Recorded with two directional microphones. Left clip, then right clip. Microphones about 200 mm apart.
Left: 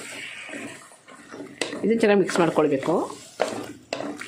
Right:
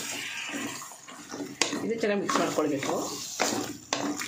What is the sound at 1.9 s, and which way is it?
Speech, 45° left (ahead or behind).